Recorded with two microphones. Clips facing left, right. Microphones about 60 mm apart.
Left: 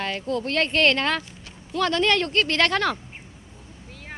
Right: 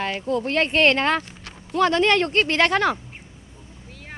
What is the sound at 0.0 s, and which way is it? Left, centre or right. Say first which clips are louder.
A woman's voice: right 2 dB; centre.